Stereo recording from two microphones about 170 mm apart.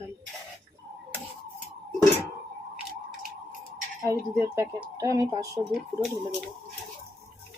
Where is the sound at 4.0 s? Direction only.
20° right (ahead or behind).